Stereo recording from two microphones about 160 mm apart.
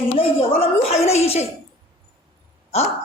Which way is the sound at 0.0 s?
35° left (ahead or behind).